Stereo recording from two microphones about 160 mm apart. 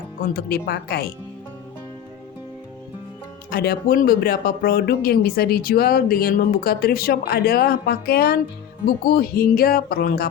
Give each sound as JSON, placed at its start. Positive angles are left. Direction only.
{"t": 0.3, "sound": "speech", "side_deg": 75}
{"t": 3.5, "sound": "speech", "side_deg": 75}